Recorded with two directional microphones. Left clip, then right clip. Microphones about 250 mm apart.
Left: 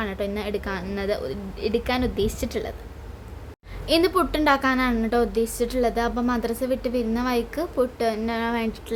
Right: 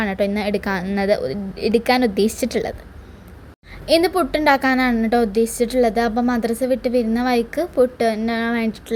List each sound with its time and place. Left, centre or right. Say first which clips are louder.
0.0 s a woman's voice: right 7 dB; right
3.8 s a woman's voice: right 4 dB; centre